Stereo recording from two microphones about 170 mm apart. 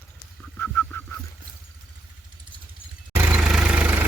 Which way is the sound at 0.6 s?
10° left (ahead or behind).